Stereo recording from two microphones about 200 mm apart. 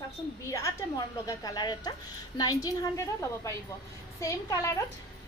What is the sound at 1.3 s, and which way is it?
A woman's voice, 20° left (ahead or behind).